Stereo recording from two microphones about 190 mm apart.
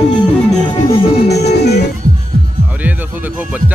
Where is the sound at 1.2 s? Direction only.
60° left (ahead or behind).